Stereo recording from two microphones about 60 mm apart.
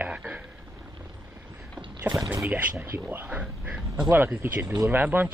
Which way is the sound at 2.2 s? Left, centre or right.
Right.